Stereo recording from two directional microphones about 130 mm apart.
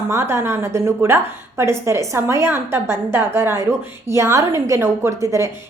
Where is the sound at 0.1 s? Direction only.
20° right (ahead or behind).